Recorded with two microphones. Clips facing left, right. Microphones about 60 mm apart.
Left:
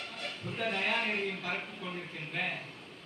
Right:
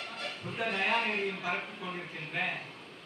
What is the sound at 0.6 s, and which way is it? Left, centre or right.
Speech, right.